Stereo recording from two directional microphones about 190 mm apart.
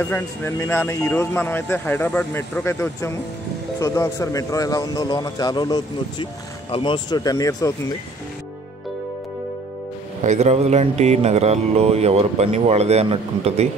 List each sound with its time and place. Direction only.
0.0 s speech: 10° left (ahead or behind)
10.2 s speech: 35° right (ahead or behind)